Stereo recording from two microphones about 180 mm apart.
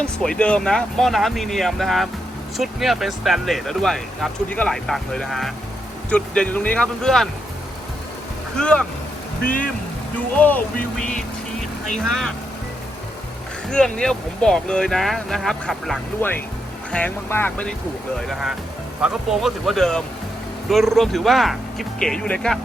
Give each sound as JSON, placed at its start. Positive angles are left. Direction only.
{"t": 0.0, "sound": "speech", "side_deg": 5}
{"t": 8.5, "sound": "speech", "side_deg": 5}
{"t": 9.4, "sound": "speech", "side_deg": 50}
{"t": 10.3, "sound": "speech", "side_deg": 10}
{"t": 13.7, "sound": "speech", "side_deg": 5}
{"t": 16.2, "sound": "speech", "side_deg": 10}
{"t": 18.3, "sound": "speech", "side_deg": 0}